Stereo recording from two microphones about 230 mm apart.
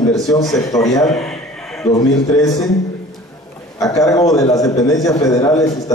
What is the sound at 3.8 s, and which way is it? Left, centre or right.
A man's voice, centre.